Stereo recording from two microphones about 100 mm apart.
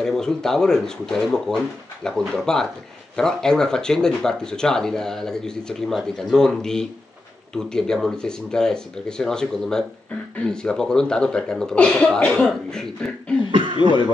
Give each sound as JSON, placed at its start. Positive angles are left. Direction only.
{"t": 0.0, "sound": "speech", "side_deg": 5}
{"t": 13.5, "sound": "cough", "side_deg": -55}